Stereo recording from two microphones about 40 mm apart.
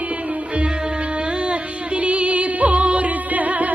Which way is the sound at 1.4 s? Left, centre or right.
Right.